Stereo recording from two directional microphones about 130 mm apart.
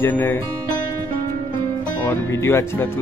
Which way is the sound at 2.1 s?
20° left (ahead or behind).